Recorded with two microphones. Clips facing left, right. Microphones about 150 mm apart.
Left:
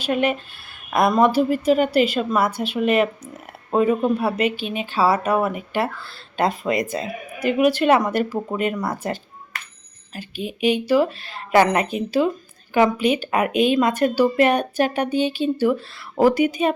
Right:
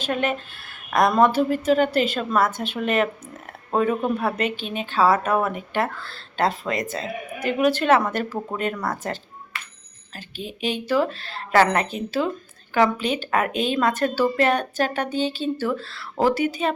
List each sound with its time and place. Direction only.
0.0 s a woman's voice: 10° left (ahead or behind)
9.5 s a sound: 40° left (ahead or behind)
10.2 s a woman's voice: 10° left (ahead or behind)